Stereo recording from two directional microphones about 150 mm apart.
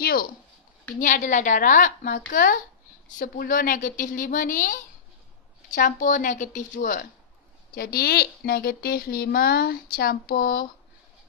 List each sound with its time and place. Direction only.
0.0 s speech: 85° left
0.9 s speech: 60° left (ahead or behind)
7.7 s speech: 90° left